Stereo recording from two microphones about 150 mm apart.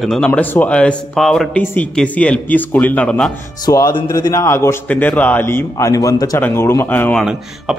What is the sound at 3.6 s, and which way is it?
A man's voice, 25° left (ahead or behind).